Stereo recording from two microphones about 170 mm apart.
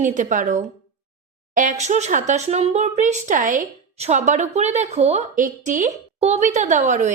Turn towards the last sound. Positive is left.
turn(degrees=-45)  # may be behind; listen again after turning